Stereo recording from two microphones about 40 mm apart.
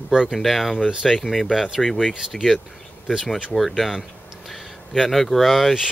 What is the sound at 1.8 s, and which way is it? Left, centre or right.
Speech, centre.